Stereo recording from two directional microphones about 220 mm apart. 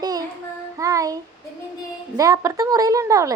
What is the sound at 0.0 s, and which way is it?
Child singing, 15° right (ahead or behind).